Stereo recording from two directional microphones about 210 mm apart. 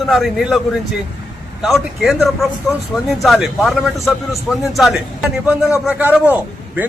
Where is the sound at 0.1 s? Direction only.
Centre (ahead or behind).